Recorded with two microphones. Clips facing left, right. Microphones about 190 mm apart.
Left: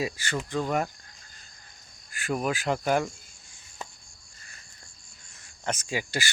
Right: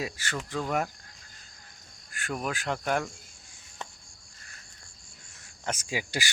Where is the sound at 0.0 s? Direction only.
Centre (ahead or behind).